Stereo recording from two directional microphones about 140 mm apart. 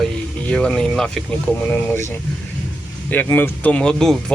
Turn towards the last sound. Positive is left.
turn(degrees=5)  # may be behind; listen again after turning